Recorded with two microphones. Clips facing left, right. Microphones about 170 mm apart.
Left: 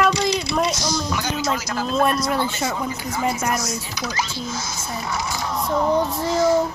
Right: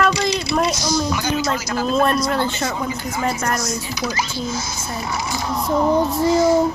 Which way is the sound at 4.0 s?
10° right (ahead or behind).